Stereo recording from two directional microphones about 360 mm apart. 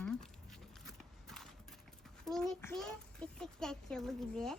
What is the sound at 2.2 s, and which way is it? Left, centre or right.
A child's voice, centre.